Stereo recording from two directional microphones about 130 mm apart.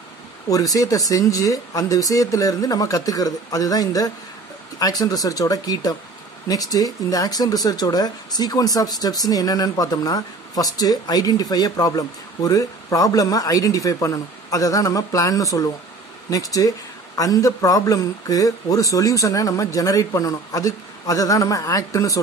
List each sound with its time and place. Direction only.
0.5 s speech: 25° left (ahead or behind)